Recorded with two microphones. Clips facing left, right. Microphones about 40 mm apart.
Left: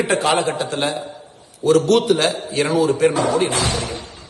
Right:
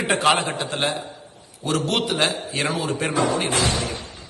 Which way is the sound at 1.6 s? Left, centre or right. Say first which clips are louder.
Left 10 dB; right.